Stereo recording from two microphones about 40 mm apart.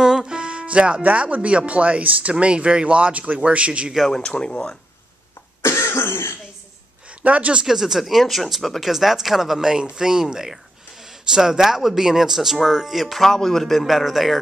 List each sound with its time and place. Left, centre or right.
0.0 s music: centre
1.0 s speech: right
4.1 s speech: left
5.7 s cough: left
7.1 s speech: right
7.6 s speech: centre